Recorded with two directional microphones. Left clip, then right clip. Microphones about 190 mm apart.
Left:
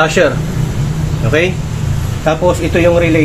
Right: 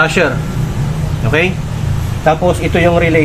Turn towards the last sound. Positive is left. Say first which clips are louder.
# left 1 dB
turn(degrees=-15)  # may be behind; listen again after turning